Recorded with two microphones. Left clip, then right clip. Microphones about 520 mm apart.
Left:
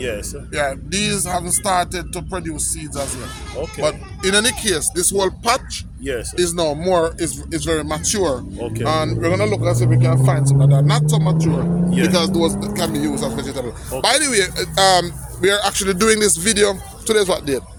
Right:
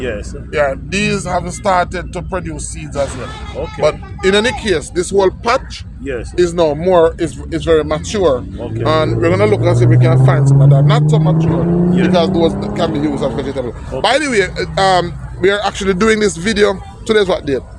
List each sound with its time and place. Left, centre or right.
0.5 s speech: left